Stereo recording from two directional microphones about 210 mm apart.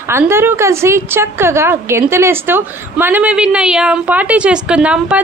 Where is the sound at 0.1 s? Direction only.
10° right (ahead or behind).